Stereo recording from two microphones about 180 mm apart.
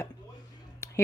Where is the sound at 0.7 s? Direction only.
15° left (ahead or behind).